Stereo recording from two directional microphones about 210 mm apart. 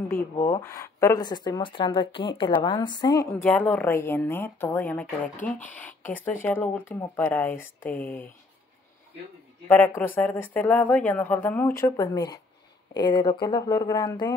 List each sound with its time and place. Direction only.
0.4 s speech: 15° left (ahead or behind)
9.7 s speech: 10° left (ahead or behind)